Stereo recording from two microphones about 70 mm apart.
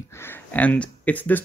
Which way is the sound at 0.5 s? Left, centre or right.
Left.